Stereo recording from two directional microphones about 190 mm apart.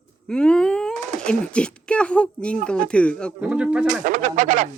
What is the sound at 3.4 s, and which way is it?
Speech, 5° right (ahead or behind).